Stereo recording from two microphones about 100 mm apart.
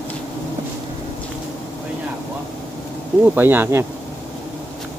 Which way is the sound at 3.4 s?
20° right (ahead or behind).